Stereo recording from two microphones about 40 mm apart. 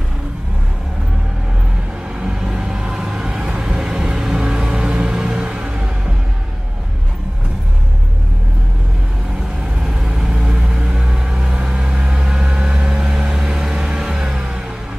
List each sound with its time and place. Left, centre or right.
2.1 s vehicle: centre
9.8 s vehicle: centre